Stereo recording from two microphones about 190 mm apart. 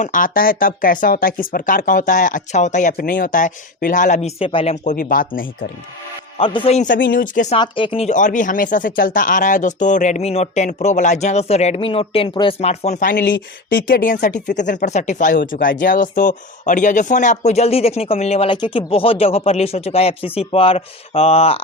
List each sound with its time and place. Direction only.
0.0 s speech: 45° left (ahead or behind)
4.9 s speech: 45° left (ahead or behind)
6.3 s speech: 25° left (ahead or behind)
7.1 s speech: 45° left (ahead or behind)
7.5 s speech: 25° left (ahead or behind); by 13.3 s 50° left (ahead or behind)
13.3 s speech: 70° left (ahead or behind)
13.8 s speech: 45° left (ahead or behind); by 21.6 s 30° left (ahead or behind)